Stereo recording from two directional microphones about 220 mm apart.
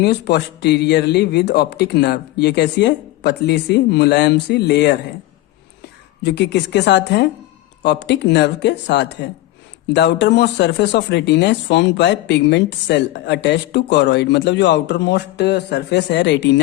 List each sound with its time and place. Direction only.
0.0 s speech: 50° left (ahead or behind)
6.2 s speech: 50° left (ahead or behind)